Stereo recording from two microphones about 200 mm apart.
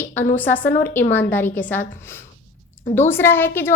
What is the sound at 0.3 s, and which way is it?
A woman's voice, 10° left (ahead or behind).